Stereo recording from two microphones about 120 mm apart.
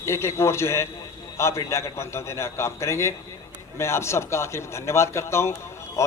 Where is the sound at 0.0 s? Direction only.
20° left (ahead or behind).